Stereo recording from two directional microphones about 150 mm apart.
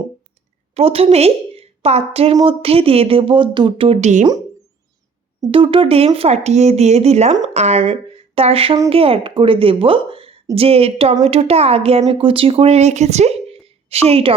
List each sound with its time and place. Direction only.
0.7 s a woman's voice: 40° right (ahead or behind)
5.5 s a woman's voice: 35° right (ahead or behind)